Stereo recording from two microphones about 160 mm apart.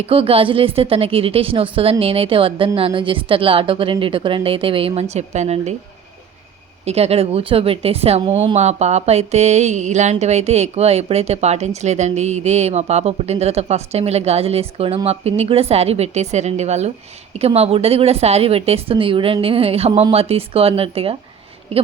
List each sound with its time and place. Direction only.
0.0 s a woman's voice: 35° right (ahead or behind)
6.8 s a woman's voice: 40° right (ahead or behind)
8.3 s a sound: 40° right (ahead or behind)
17.3 s a woman's voice: 40° right (ahead or behind)